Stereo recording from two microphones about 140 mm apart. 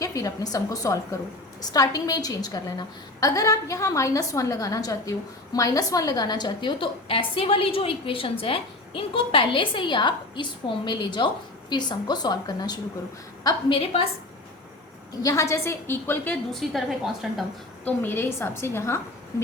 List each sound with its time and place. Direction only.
0.0 s a woman's voice: 25° left (ahead or behind)
15.1 s a woman's voice: 25° left (ahead or behind)
16.5 s a woman's voice: centre (ahead or behind)
17.8 s a woman's voice: 15° left (ahead or behind)